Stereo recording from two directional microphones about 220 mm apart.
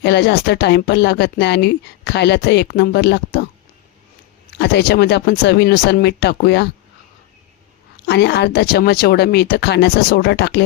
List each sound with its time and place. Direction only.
0.0 s speech: 50° left (ahead or behind)
4.5 s speech: 50° left (ahead or behind)
8.0 s speech: 50° left (ahead or behind)